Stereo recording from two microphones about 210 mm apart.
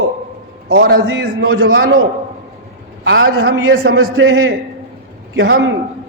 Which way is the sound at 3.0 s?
60° right (ahead or behind).